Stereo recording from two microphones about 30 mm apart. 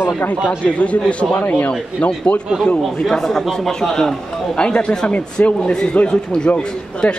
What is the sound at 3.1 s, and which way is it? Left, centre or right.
Speech, centre.